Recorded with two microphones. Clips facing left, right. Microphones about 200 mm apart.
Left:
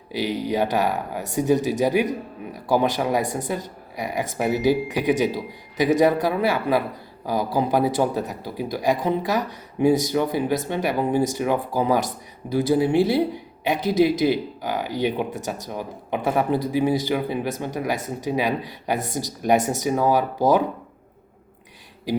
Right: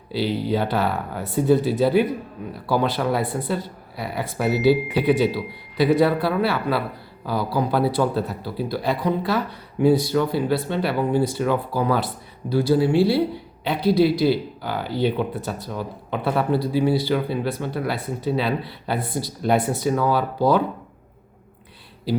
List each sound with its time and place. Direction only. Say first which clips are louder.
0.1 s speech: right 2 dB; 15° left (ahead or behind)